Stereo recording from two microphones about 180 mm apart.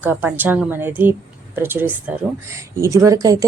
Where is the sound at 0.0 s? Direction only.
10° right (ahead or behind).